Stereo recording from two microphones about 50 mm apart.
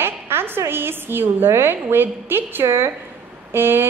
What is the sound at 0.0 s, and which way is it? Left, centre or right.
A woman's voice, right.